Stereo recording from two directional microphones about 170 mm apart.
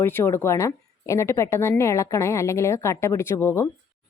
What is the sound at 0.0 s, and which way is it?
A woman's voice, 15° left (ahead or behind).